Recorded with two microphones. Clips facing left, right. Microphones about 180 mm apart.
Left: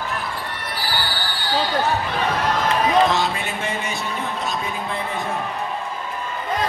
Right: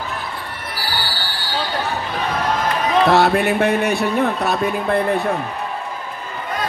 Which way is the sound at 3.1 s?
60° right (ahead or behind).